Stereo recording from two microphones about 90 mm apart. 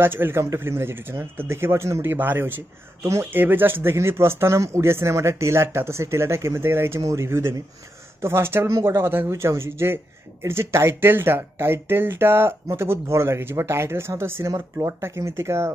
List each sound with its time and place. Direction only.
0.0 s speech: 25° right (ahead or behind)
3.0 s speech: 35° right (ahead or behind)
3.3 s speech: 20° right (ahead or behind)